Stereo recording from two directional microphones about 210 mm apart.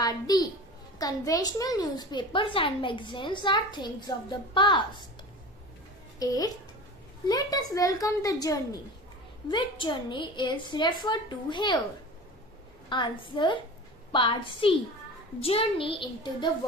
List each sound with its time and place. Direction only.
0.0 s a child's voice: 20° left (ahead or behind)
6.1 s a woman's voice: 15° left (ahead or behind)
12.9 s a woman's voice: 25° left (ahead or behind)